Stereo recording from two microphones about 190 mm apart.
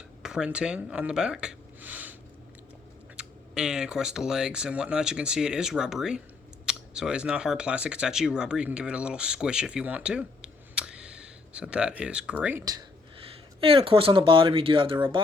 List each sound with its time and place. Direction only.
0.2 s speech: 5° right (ahead or behind)
3.2 s speech: 5° right (ahead or behind)
12.6 s speech: 25° right (ahead or behind)